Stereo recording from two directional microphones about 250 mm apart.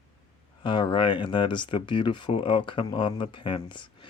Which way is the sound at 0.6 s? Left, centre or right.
Centre.